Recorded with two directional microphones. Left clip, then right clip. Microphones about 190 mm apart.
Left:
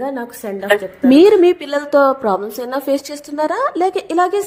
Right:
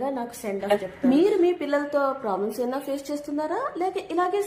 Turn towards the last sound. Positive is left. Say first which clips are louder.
# left 9 dB
turn(degrees=30)  # may be behind; listen again after turning